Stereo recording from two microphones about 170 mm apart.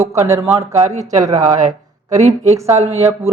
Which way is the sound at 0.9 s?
40° right (ahead or behind).